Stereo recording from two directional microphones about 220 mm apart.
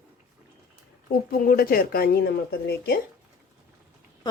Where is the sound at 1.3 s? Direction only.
40° left (ahead or behind).